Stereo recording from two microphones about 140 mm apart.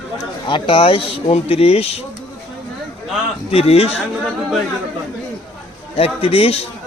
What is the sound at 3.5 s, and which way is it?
Speech, 45° left (ahead or behind).